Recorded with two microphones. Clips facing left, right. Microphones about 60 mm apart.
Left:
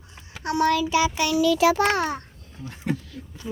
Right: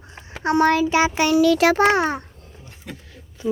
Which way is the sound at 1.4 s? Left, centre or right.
Right.